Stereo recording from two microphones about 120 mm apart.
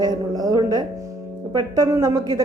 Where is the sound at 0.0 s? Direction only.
35° right (ahead or behind).